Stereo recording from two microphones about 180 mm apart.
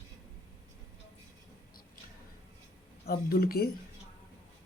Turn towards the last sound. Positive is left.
turn(degrees=60)  # may be behind; listen again after turning